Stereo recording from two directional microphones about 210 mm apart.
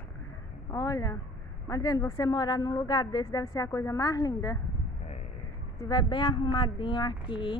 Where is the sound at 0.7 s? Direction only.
15° left (ahead or behind).